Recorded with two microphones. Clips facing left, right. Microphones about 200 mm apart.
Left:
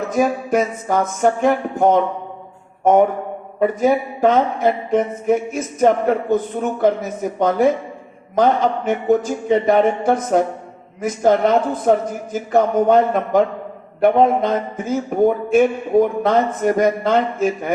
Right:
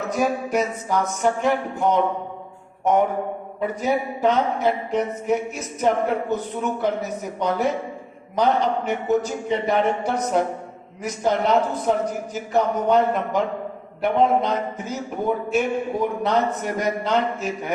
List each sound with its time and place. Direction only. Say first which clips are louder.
0.1 s speech: left 4 dB; 50° left (ahead or behind)